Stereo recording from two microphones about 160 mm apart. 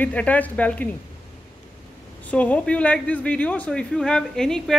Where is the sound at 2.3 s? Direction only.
10° left (ahead or behind).